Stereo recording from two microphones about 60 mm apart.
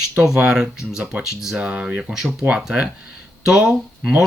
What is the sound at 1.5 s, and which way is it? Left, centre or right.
Speech, centre.